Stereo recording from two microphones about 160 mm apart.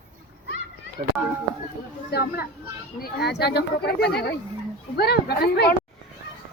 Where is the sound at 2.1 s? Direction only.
85° left.